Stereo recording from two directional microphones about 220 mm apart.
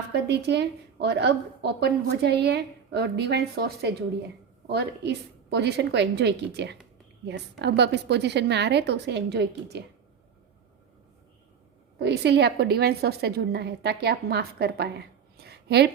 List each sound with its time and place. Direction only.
0.1 s a woman's voice: 50° right (ahead or behind)
11.9 s a woman's voice: 50° right (ahead or behind)